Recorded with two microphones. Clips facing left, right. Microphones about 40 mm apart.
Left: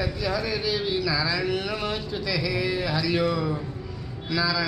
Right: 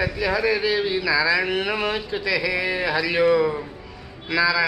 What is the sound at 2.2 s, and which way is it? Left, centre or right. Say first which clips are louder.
A man's voice: right 3 dB; right.